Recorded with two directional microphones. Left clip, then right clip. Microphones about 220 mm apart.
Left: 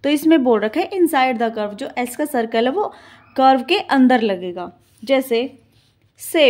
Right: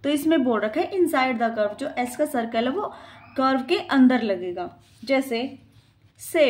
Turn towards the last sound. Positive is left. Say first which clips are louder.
# left 4 dB
turn(degrees=35)  # may be behind; listen again after turning